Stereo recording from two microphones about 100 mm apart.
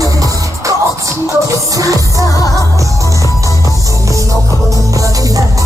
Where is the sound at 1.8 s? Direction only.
35° right (ahead or behind).